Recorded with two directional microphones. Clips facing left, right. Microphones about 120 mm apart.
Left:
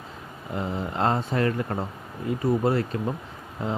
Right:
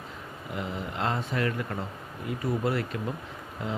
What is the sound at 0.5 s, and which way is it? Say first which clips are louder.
Speech: left 5 dB; 30° left (ahead or behind).